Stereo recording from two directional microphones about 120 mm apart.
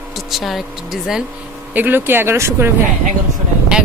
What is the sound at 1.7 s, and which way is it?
Speech, 15° right (ahead or behind).